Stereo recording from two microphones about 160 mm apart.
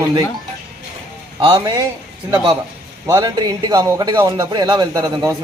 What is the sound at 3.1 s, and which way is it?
A man's voice, 25° right (ahead or behind).